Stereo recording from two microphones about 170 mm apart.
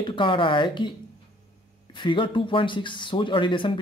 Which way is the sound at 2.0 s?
30° left (ahead or behind).